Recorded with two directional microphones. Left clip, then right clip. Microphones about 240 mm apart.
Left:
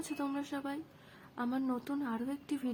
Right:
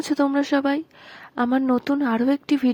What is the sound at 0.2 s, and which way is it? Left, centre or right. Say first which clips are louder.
Speech: right 19 dB; right.